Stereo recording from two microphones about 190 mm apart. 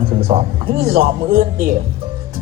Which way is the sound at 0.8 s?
55° right (ahead or behind).